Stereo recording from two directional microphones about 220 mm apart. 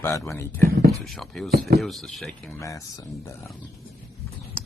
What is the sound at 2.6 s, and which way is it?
Speech, 15° left (ahead or behind).